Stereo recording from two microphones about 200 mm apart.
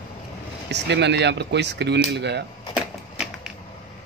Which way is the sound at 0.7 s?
60° right (ahead or behind).